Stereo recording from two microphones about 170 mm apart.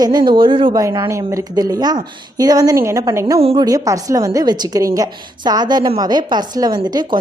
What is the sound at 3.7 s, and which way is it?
A woman's voice, 20° right (ahead or behind).